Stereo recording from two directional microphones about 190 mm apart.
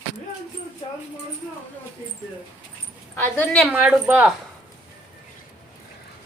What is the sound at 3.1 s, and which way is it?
Speech, 10° left (ahead or behind).